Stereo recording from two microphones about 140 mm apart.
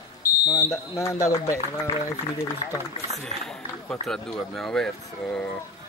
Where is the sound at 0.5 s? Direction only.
20° left (ahead or behind).